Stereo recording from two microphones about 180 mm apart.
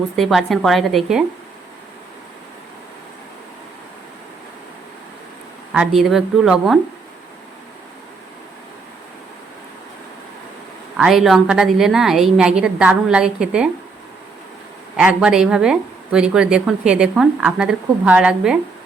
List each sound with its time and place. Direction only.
0.2 s speech: centre (ahead or behind)
5.7 s speech: 5° right (ahead or behind)
10.9 s speech: centre (ahead or behind)
14.9 s speech: 5° right (ahead or behind)